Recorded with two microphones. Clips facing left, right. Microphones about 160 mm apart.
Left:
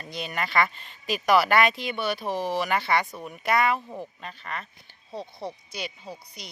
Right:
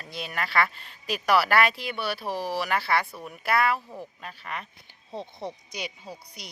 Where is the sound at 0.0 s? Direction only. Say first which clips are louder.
Left 2 dB; centre (ahead or behind).